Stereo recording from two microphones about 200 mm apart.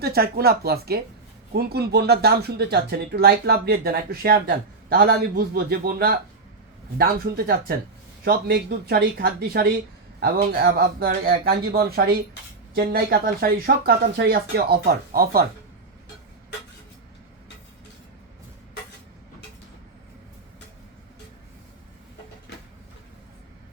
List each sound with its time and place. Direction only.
0.0 s speech: 50° right (ahead or behind)